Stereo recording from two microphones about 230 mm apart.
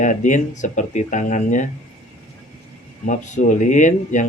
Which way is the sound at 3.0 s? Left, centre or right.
Left.